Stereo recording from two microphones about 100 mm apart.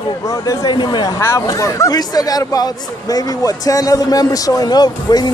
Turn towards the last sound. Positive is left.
turn(degrees=45)  # may be behind; listen again after turning